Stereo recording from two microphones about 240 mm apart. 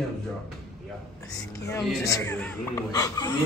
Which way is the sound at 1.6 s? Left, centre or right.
Centre.